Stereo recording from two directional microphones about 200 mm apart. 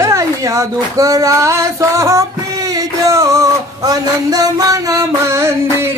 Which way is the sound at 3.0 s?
15° right (ahead or behind).